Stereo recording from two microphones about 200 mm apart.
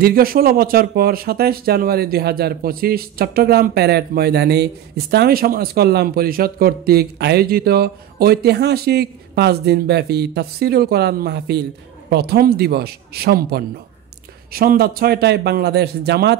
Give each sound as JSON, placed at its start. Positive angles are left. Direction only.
{"t": 0.0, "sound": "speech", "side_deg": -50}